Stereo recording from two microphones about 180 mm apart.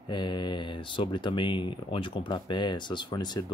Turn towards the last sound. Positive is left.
turn(degrees=25)  # may be behind; listen again after turning